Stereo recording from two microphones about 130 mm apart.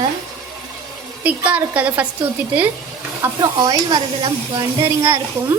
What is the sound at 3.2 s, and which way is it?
Speech, 30° right (ahead or behind).